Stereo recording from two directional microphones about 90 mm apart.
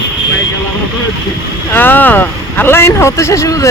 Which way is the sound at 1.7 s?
20° left (ahead or behind).